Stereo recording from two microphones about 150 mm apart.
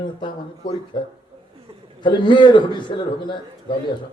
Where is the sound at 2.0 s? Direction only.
30° left (ahead or behind).